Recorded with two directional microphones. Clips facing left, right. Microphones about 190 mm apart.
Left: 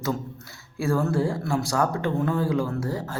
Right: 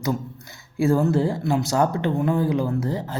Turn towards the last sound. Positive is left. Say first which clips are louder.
# right 3 dB
turn(degrees=-20)  # may be behind; listen again after turning